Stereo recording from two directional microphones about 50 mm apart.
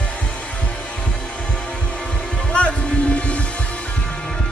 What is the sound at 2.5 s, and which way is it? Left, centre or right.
Music, left.